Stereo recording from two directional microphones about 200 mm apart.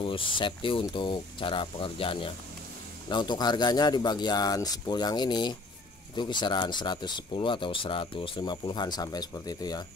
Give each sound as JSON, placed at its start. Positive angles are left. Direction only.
{"t": 0.0, "sound": "speech", "side_deg": 25}